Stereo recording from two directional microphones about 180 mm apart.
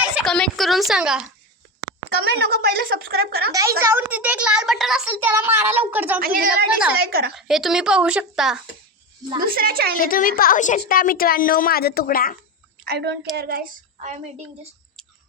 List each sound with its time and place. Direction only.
0.2 s a woman's voice: 5° left (ahead or behind)
2.2 s a woman's voice: 65° right (ahead or behind)
3.5 s a child's voice: 15° right (ahead or behind)
6.1 s a woman's voice: 55° right (ahead or behind)
7.3 s a woman's voice: centre (ahead or behind)
9.4 s a woman's voice: 55° right (ahead or behind)
10.0 s a woman's voice: 50° left (ahead or behind)
12.8 s a woman's voice: 65° right (ahead or behind)